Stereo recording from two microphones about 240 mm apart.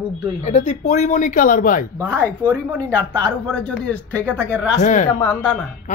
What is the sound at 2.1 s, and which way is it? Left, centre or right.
Speech, centre.